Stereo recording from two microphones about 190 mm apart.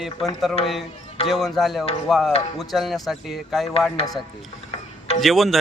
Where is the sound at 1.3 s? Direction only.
Centre (ahead or behind).